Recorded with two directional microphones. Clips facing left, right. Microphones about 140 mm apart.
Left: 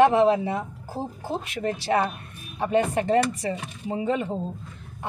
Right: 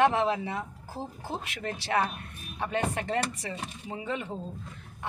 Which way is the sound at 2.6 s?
30° left (ahead or behind).